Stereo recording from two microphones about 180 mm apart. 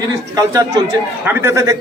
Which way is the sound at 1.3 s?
15° right (ahead or behind).